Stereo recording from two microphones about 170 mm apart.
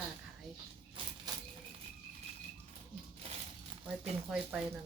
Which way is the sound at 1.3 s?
25° right (ahead or behind).